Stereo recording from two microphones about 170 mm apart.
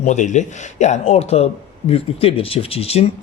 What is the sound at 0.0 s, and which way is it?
Speech, 45° left (ahead or behind).